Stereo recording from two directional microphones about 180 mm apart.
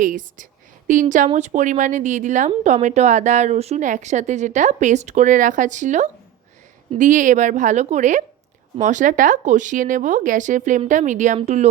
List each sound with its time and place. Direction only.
0.0 s a woman's voice: 45° right (ahead or behind)